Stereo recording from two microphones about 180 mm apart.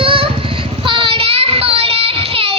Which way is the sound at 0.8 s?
30° right (ahead or behind).